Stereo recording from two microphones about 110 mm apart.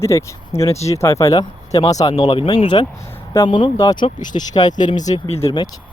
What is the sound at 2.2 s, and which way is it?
Speech, 45° left (ahead or behind).